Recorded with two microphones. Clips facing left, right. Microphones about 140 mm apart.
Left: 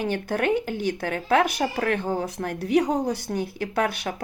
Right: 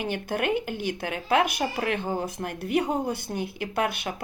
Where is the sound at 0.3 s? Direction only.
55° left (ahead or behind).